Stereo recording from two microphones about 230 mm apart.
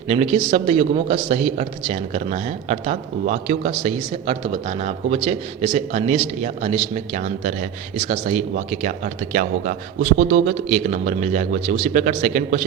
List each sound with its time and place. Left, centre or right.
0.1 s a man's voice: right